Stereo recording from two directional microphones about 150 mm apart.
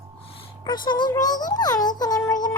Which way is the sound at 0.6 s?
30° left (ahead or behind).